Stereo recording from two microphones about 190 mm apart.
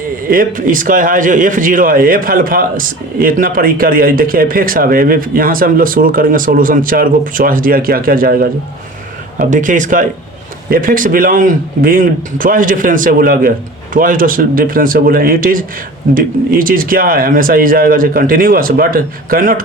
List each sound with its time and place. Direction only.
0.3 s a man's voice: 45° right (ahead or behind)